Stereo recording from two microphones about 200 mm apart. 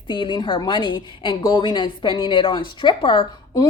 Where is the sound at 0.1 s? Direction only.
25° left (ahead or behind).